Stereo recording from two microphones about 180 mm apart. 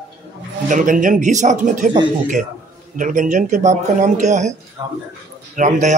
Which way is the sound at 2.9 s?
45° right (ahead or behind).